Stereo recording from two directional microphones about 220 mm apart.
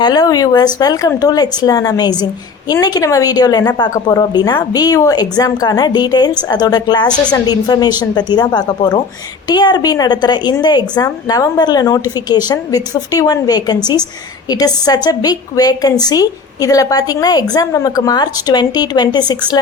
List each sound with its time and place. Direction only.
0.0 s a woman's voice: 20° left (ahead or behind)